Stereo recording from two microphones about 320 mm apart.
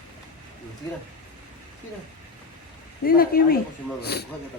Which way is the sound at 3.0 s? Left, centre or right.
Left.